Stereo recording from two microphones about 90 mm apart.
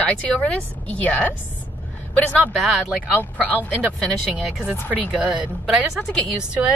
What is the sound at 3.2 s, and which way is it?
A woman's voice, 15° left (ahead or behind).